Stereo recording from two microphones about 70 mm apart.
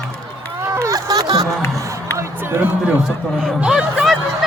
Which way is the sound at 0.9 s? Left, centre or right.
Right.